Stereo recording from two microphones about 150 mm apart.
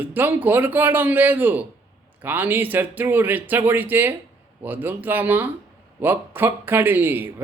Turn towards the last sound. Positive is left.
turn(degrees=-15)  # may be behind; listen again after turning